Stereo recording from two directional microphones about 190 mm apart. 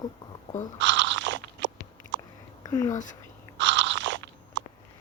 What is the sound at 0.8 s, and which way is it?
Crunch, 75° right (ahead or behind).